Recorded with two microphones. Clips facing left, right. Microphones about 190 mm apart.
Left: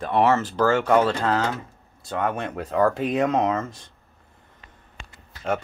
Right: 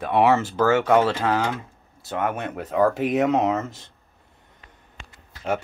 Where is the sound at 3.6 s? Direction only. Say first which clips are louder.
Even; 25° right (ahead or behind).